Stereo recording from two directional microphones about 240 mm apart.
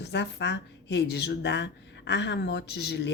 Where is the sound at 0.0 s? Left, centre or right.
Left.